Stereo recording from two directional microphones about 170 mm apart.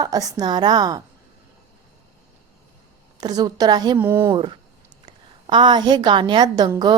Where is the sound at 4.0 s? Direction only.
10° right (ahead or behind).